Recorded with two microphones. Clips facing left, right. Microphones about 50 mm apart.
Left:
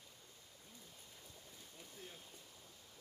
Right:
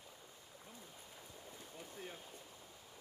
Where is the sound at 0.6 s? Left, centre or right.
Right.